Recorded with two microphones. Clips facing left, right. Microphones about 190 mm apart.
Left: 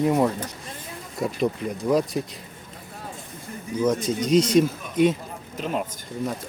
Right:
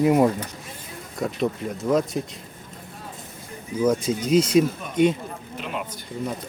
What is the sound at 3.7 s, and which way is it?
Speech, 10° right (ahead or behind).